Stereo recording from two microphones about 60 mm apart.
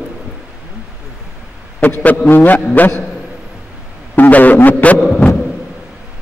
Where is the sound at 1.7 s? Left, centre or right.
Left.